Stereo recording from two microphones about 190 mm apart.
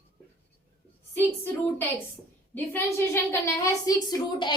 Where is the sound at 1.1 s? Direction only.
10° left (ahead or behind).